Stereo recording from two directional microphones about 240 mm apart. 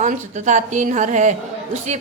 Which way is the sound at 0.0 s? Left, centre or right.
Right.